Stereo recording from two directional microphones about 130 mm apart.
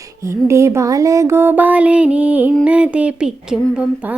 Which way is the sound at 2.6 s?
10° right (ahead or behind).